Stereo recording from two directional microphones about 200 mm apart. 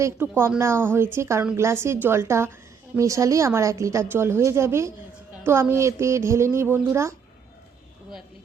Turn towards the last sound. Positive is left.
turn(degrees=-15)  # may be behind; listen again after turning